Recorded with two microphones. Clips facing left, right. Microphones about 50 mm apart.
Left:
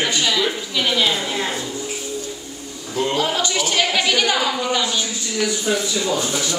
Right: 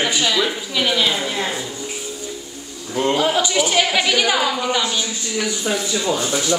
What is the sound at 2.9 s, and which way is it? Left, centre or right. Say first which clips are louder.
A woman's voice: right 3 dB; centre.